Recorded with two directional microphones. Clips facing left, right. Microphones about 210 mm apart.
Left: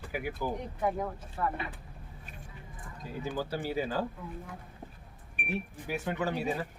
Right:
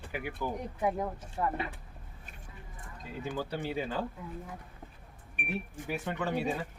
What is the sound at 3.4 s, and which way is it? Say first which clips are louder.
Speech: left 2 dB; 5° left (ahead or behind).